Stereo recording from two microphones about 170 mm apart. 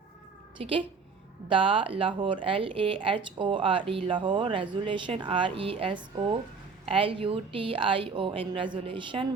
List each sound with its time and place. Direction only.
0.6 s speech: 30° right (ahead or behind)